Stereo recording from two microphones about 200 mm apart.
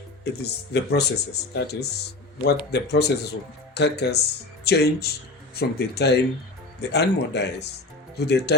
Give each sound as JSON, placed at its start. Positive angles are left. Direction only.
{"t": 0.3, "sound": "speech", "side_deg": 55}